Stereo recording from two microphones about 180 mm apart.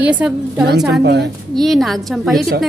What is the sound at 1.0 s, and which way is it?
Speech, 65° right (ahead or behind).